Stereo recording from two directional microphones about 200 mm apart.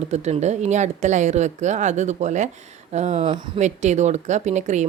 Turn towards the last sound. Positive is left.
turn(degrees=-35)  # may be behind; listen again after turning